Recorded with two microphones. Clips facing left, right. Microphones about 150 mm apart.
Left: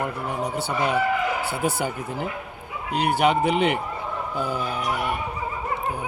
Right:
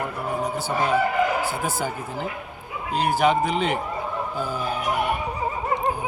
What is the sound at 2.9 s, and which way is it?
Speech, 65° left (ahead or behind).